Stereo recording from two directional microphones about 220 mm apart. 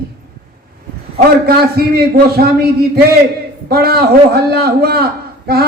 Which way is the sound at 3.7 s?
45° right (ahead or behind).